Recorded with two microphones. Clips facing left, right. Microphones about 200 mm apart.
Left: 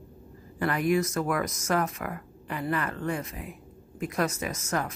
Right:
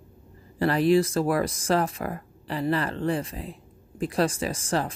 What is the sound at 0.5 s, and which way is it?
Speech, 30° right (ahead or behind).